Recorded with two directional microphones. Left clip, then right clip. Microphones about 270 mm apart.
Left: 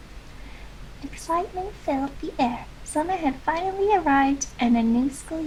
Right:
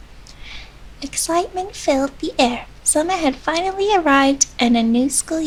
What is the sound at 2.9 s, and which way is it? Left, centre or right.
Speech, right.